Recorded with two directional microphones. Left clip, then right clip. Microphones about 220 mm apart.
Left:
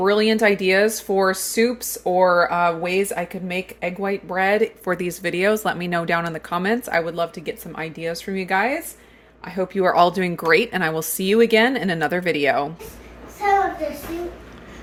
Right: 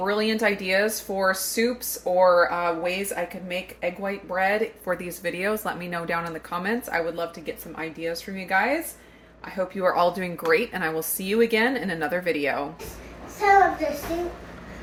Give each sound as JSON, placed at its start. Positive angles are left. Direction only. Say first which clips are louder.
{"t": 0.0, "sound": "speech", "louder": "left 6 dB", "side_deg": 55}